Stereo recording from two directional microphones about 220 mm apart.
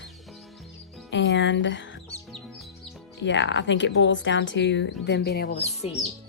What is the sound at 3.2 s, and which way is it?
A woman's voice, 55° left (ahead or behind).